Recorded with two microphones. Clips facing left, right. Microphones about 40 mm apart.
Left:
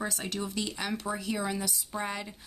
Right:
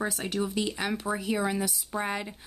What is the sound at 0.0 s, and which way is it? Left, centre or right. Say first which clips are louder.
Speech: right 4 dB; centre.